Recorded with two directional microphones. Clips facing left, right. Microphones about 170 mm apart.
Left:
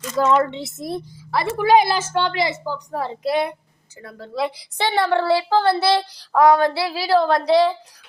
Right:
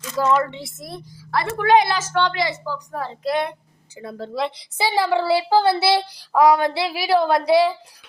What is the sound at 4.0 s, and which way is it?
Child singing, 25° right (ahead or behind).